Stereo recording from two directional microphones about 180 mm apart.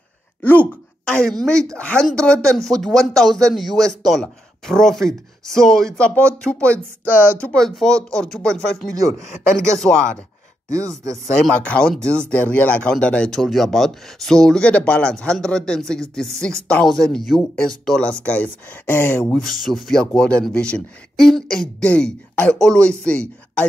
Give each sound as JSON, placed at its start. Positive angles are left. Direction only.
{"t": 0.4, "sound": "speech", "side_deg": 10}
{"t": 10.7, "sound": "speech", "side_deg": -15}
{"t": 11.4, "sound": "speech", "side_deg": 5}